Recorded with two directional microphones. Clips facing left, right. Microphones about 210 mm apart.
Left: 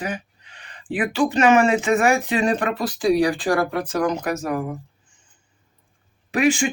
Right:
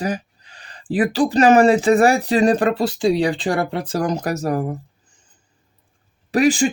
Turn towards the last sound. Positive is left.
turn(degrees=-35)  # may be behind; listen again after turning